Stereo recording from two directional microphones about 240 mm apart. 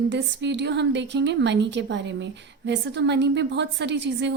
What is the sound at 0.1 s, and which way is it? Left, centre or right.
A woman's voice, right.